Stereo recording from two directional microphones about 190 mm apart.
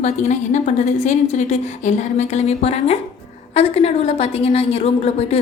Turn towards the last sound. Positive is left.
turn(degrees=35)  # may be behind; listen again after turning